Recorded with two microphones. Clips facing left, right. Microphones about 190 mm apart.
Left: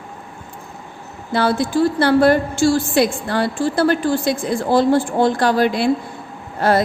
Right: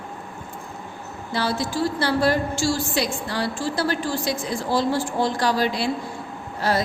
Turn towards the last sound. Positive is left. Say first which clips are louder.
# left 6 dB
turn(degrees=55)  # may be behind; listen again after turning